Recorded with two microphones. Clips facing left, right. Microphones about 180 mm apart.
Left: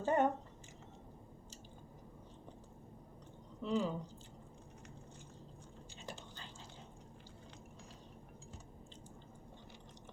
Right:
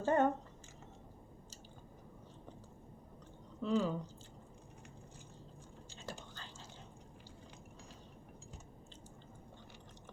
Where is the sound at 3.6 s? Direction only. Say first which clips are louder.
Right 2 dB; 15° left (ahead or behind).